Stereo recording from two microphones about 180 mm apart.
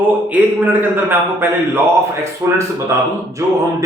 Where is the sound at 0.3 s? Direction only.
10° right (ahead or behind).